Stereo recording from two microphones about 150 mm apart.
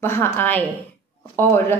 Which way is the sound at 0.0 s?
15° left (ahead or behind).